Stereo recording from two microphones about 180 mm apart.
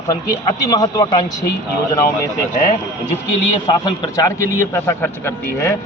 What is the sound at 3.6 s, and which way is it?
A man's voice, 20° left (ahead or behind).